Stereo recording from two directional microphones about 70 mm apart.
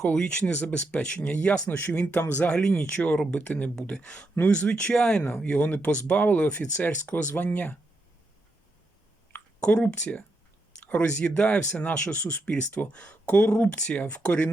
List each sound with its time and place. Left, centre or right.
0.0 s speech: centre
9.3 s speech: centre